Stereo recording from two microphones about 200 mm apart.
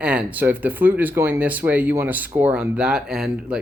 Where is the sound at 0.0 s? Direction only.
5° right (ahead or behind).